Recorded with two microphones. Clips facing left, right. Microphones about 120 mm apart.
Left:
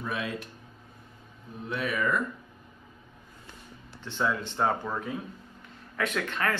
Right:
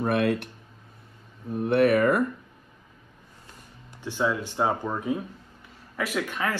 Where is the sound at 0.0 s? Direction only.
65° right (ahead or behind).